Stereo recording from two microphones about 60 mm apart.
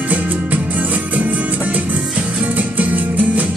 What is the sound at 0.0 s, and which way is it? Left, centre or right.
Music, right.